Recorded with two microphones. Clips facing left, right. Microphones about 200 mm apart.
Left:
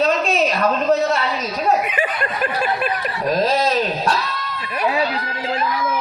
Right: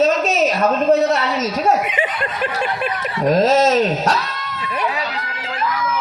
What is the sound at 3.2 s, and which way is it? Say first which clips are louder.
Speech: right 5 dB; 85° right.